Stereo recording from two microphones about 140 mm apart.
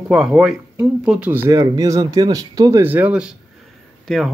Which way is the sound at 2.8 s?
10° right (ahead or behind).